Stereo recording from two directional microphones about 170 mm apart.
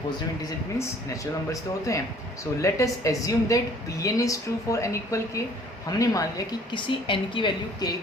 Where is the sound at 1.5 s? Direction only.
20° left (ahead or behind).